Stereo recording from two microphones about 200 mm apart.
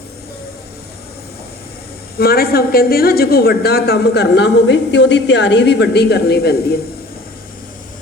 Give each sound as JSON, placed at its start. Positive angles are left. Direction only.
{"t": 2.1, "sound": "a woman's voice", "side_deg": 50}